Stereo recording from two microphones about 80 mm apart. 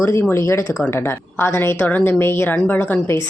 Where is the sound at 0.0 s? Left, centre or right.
Left.